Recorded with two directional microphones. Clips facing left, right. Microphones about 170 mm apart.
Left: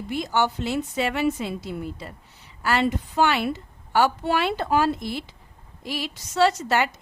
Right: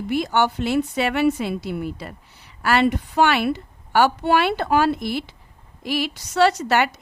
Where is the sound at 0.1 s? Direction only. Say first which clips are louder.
Right 3 dB; 65° right (ahead or behind).